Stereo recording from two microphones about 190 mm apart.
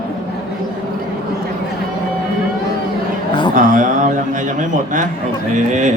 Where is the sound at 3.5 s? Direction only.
45° right (ahead or behind).